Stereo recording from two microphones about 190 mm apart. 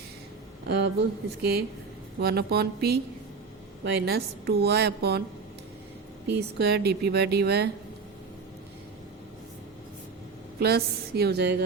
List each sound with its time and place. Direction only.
0.7 s a woman's voice: 65° right (ahead or behind)
6.3 s a woman's voice: 60° right (ahead or behind)
10.6 s a woman's voice: 55° right (ahead or behind)